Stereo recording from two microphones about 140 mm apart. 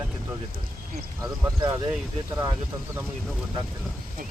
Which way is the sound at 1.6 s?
20° right (ahead or behind).